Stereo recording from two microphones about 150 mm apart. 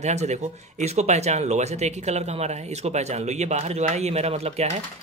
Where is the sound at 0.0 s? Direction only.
50° right (ahead or behind).